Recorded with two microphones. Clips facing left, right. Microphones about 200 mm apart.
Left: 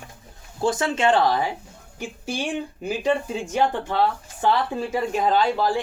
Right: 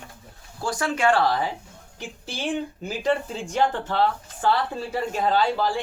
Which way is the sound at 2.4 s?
10° left (ahead or behind).